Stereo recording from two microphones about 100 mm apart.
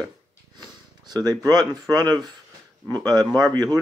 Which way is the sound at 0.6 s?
40° right (ahead or behind).